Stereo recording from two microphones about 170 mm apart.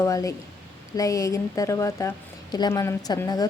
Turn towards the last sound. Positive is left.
turn(degrees=20)  # may be behind; listen again after turning